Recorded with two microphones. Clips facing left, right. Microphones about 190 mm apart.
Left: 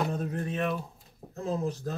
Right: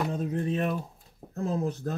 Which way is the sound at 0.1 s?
20° right (ahead or behind).